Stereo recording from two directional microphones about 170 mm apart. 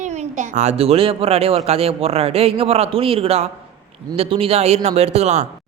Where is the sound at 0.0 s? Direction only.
45° right (ahead or behind).